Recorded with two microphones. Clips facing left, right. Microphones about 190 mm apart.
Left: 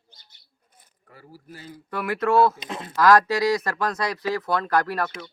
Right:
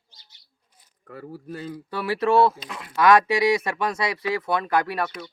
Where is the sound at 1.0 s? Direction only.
65° right (ahead or behind).